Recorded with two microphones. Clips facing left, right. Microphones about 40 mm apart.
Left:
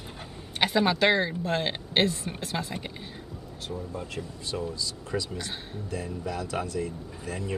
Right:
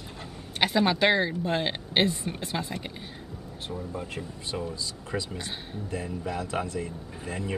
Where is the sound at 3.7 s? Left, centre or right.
Centre.